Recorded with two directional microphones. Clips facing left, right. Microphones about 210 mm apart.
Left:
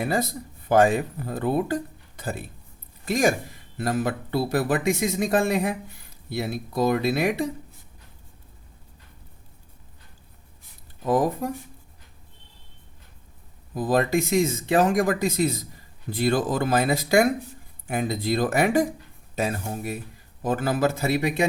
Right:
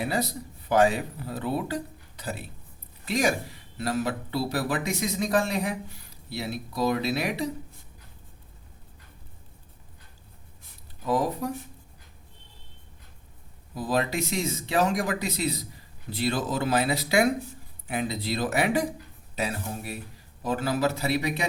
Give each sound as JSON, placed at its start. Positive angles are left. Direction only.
{"t": 0.1, "sound": "speech", "side_deg": 50}
{"t": 6.3, "sound": "speech", "side_deg": 50}
{"t": 11.0, "sound": "speech", "side_deg": 50}
{"t": 13.7, "sound": "speech", "side_deg": 50}